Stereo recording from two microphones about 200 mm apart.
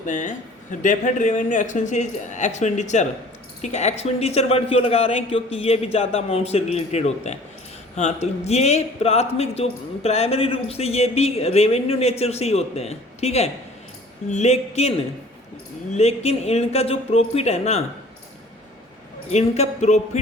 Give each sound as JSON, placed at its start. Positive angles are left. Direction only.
{"t": 0.0, "sound": "speech", "side_deg": 40}
{"t": 16.0, "sound": "speech", "side_deg": 30}
{"t": 19.3, "sound": "speech", "side_deg": 35}